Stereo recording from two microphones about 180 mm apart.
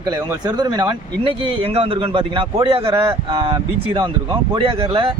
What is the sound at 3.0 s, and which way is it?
Speech, 20° right (ahead or behind).